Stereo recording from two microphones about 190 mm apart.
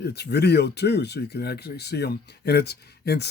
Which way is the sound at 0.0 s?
60° left (ahead or behind).